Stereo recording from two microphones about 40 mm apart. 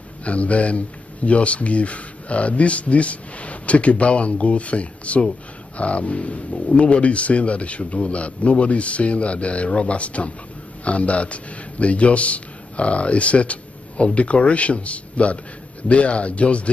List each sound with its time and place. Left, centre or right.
0.2 s a man's voice: left